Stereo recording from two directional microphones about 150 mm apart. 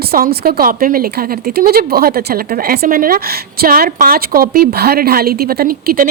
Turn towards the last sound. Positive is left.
turn(degrees=-75)  # may be behind; listen again after turning